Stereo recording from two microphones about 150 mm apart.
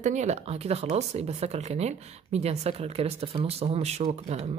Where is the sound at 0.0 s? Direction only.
50° right (ahead or behind).